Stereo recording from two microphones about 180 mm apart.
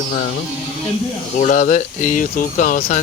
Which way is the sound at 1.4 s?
45° left (ahead or behind).